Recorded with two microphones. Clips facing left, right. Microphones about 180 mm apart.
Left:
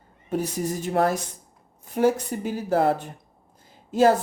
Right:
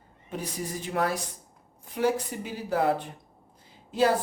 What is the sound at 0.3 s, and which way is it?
Speech, 45° left (ahead or behind).